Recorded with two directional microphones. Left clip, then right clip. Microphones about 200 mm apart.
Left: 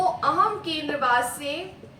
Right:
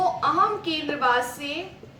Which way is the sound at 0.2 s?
25° right (ahead or behind).